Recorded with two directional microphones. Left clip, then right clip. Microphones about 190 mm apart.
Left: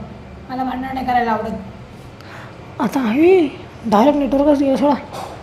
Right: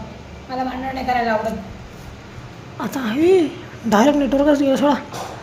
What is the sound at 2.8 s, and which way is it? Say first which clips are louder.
A woman's voice: left 4 dB; 15° left (ahead or behind).